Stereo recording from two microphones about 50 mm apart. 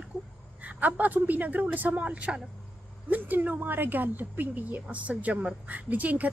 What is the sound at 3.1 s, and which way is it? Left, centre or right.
Speech, right.